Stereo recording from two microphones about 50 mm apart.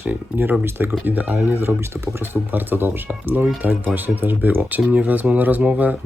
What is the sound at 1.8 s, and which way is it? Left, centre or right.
Speech, right.